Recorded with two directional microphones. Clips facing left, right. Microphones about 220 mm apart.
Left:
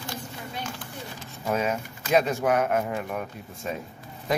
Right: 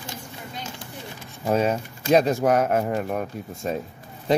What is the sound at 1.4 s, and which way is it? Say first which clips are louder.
Speech: right 5 dB; 35° right (ahead or behind).